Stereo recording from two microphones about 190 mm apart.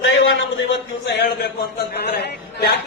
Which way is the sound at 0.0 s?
80° left.